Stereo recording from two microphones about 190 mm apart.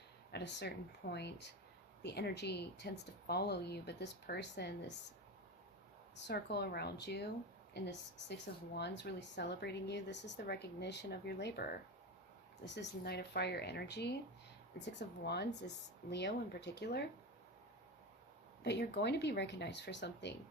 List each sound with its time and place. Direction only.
0.3 s speech: 60° left (ahead or behind)
6.1 s speech: 60° left (ahead or behind)
18.6 s speech: 65° left (ahead or behind)